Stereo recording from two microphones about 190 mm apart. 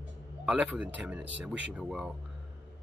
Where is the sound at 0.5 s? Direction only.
5° right (ahead or behind).